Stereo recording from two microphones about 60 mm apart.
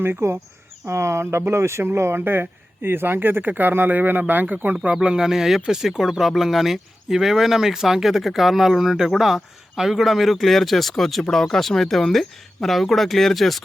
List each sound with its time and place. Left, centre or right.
0.0 s speech: right
4.9 s speech: centre